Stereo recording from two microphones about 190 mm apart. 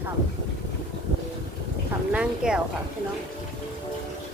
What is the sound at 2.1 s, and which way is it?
Speech, 5° right (ahead or behind).